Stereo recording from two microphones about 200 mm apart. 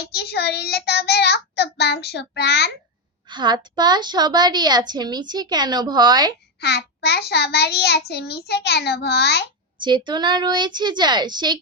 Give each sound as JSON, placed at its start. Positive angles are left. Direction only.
{"t": 0.1, "sound": "a child's voice", "side_deg": 55}
{"t": 3.2, "sound": "a woman's voice", "side_deg": -20}
{"t": 6.6, "sound": "a child's voice", "side_deg": 55}
{"t": 10.1, "sound": "a woman's voice", "side_deg": -20}